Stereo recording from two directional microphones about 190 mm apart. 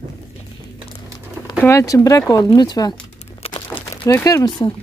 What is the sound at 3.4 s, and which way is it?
Crumpling, 25° left (ahead or behind).